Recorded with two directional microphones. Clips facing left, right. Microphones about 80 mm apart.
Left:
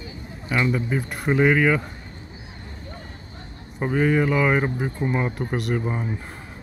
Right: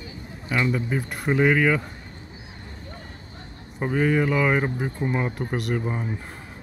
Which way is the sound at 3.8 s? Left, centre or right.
Left.